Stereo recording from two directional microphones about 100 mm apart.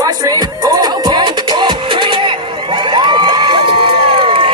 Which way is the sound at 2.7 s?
50° right (ahead or behind).